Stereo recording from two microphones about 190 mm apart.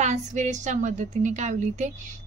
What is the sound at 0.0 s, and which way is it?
Speech, 40° right (ahead or behind).